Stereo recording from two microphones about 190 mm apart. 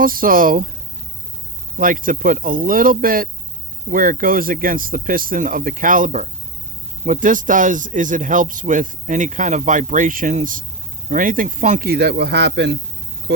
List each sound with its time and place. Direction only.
0.0 s speech: 50° right (ahead or behind)
1.8 s speech: 45° right (ahead or behind); by 12.7 s 65° right (ahead or behind)